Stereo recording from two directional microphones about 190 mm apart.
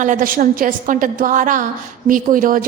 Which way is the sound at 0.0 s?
45° right (ahead or behind).